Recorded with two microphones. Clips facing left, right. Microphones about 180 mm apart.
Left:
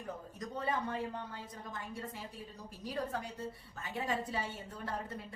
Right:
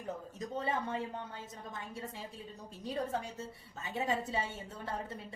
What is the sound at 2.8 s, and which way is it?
A woman's voice, 25° right (ahead or behind).